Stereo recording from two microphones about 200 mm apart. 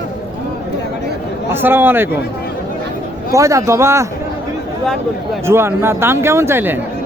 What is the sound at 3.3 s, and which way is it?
Speech, 15° right (ahead or behind).